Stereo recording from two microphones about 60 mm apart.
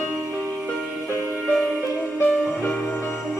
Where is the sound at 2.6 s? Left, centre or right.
Left.